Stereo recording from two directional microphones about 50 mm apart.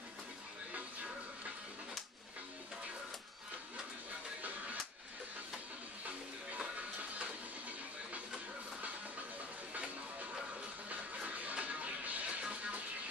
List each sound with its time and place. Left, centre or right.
10.9 s music: right